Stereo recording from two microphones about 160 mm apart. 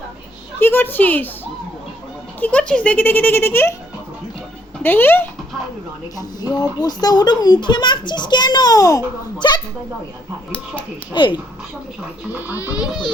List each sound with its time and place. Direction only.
0.6 s a child's voice: 15° left (ahead or behind)
2.4 s a child's voice: 5° left (ahead or behind)
4.8 s a child's voice: 15° left (ahead or behind)
6.1 s a child's voice: 25° left (ahead or behind)
11.1 s a child's voice: 30° left (ahead or behind)
12.7 s speech: 5° right (ahead or behind)